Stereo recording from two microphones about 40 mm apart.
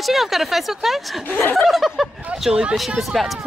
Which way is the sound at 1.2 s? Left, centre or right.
Left.